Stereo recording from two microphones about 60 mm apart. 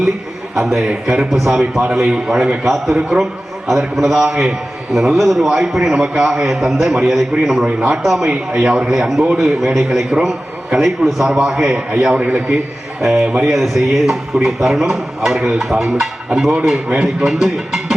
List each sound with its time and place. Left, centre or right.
0.5 s a man's voice: centre
8.3 s a man's voice: centre
12.1 s speech: right
13.0 s a man's voice: centre
16.9 s speech: centre
17.2 s a man's voice: centre